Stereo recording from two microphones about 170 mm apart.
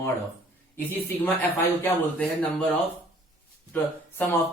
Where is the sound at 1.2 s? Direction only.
10° left (ahead or behind).